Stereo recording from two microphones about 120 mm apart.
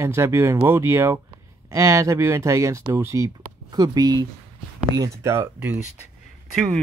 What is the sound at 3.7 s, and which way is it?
Speech, 35° right (ahead or behind).